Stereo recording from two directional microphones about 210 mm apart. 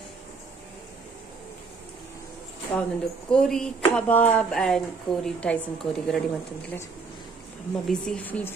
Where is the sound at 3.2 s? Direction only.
5° left (ahead or behind).